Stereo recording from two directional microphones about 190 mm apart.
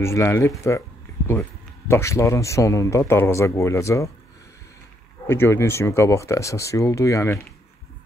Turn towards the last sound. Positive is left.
turn(degrees=15)  # may be behind; listen again after turning